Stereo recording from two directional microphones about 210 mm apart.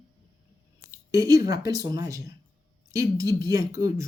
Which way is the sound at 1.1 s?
15° right (ahead or behind).